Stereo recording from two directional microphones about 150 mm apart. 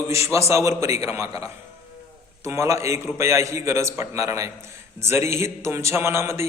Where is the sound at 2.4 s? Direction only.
20° right (ahead or behind).